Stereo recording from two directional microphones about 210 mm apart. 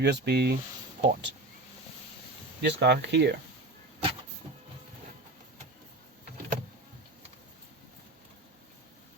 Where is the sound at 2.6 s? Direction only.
55° right (ahead or behind).